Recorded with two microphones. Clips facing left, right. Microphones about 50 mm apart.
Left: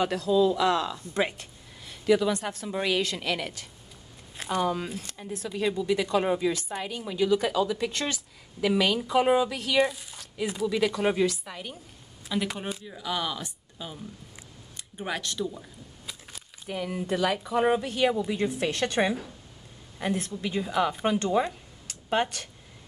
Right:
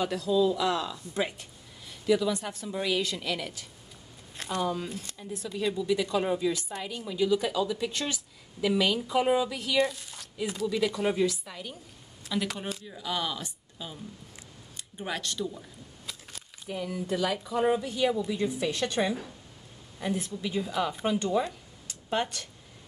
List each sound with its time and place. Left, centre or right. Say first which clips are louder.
0.0 s a woman's voice: left 2 dB; left
11.4 s a woman's voice: left 2 dB; left
12.3 s speech: left 2 dB; centre
15.0 s speech: left 2 dB; centre
16.1 s a sound: even; centre
16.6 s a woman's voice: left 2 dB; left
21.8 s a sound: left 3 dB; left